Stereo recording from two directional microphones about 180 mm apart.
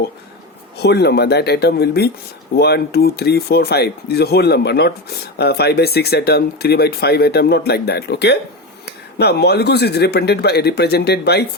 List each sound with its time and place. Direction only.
0.8 s speech: 65° left (ahead or behind)